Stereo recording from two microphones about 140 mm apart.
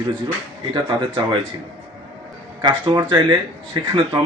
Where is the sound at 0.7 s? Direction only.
35° right (ahead or behind).